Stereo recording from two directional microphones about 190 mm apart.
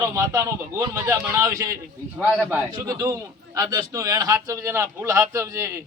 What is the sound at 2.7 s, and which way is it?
A man's voice, 20° right (ahead or behind).